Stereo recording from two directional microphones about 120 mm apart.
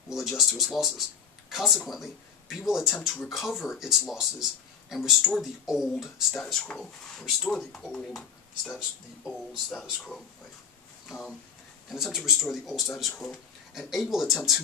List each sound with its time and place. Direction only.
0.1 s speech: centre (ahead or behind)